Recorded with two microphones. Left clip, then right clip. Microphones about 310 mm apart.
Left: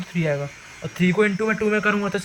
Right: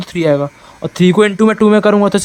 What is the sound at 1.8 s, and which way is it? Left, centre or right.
Speech, centre.